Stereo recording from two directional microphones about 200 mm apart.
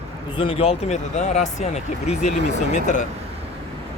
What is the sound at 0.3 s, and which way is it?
Speech, 30° left (ahead or behind).